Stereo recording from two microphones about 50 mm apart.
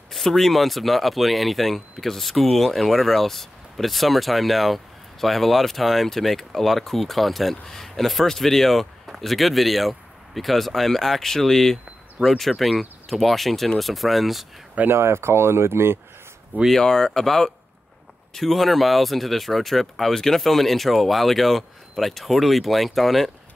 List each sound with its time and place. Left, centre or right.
0.1 s speech: centre
14.9 s speech: right
16.7 s speech: centre